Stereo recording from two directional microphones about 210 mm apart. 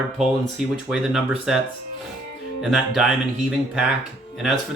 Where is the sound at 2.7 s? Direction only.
Centre (ahead or behind).